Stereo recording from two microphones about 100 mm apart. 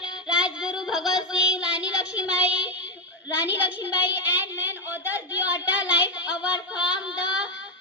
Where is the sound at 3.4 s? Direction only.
15° right (ahead or behind).